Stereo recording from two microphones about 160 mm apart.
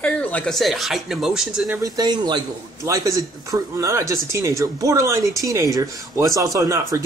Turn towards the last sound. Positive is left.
turn(degrees=-20)  # may be behind; listen again after turning